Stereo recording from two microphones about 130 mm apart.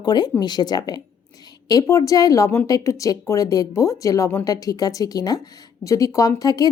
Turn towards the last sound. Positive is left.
turn(degrees=30)  # may be behind; listen again after turning